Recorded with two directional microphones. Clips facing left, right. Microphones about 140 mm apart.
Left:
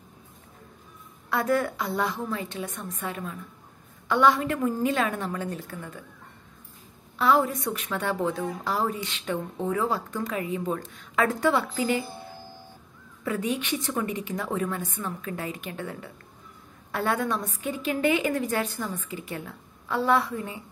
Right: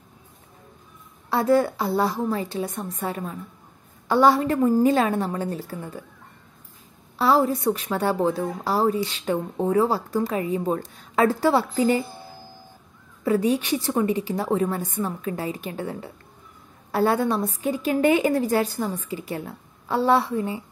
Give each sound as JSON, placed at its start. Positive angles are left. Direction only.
{"t": 1.3, "sound": "a woman's voice", "side_deg": -30}
{"t": 7.2, "sound": "a woman's voice", "side_deg": -35}
{"t": 13.2, "sound": "a woman's voice", "side_deg": -35}